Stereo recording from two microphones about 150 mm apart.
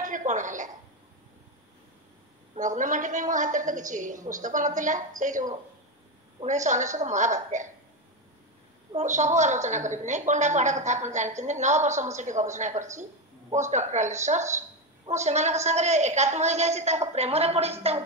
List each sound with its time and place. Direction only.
0.0 s a woman's voice: 60° right (ahead or behind)
2.5 s a woman's voice: 55° right (ahead or behind)
8.9 s a woman's voice: 55° right (ahead or behind)